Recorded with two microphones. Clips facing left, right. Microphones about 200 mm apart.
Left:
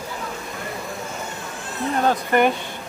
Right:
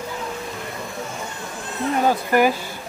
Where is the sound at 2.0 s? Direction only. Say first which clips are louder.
Right 1 dB; 5° right (ahead or behind).